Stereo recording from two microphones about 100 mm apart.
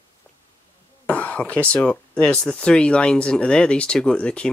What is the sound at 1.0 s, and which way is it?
Speech, 10° left (ahead or behind).